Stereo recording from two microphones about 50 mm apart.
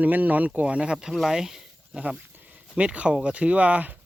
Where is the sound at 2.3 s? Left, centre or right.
Right.